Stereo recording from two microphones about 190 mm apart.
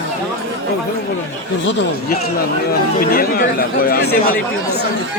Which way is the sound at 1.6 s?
70° left (ahead or behind).